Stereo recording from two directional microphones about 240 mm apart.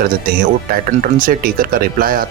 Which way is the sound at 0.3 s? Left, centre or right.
Right.